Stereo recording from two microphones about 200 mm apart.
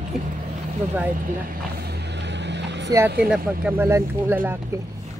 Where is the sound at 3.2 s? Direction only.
5° right (ahead or behind).